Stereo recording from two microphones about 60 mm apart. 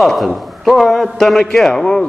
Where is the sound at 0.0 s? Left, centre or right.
Centre.